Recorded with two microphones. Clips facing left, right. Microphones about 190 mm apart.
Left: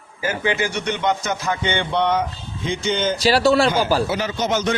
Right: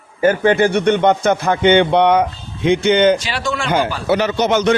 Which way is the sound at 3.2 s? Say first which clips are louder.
Left 7 dB; 35° left (ahead or behind).